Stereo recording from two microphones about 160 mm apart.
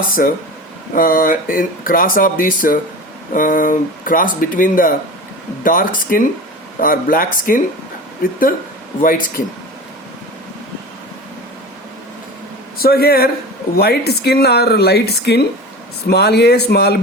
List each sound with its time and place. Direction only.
0.2 s speech: 65° left (ahead or behind)
12.8 s speech: 75° left (ahead or behind)
13.7 s speech: 90° left